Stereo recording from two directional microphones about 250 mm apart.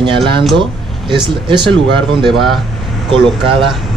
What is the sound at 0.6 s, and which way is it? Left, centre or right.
Speech, centre.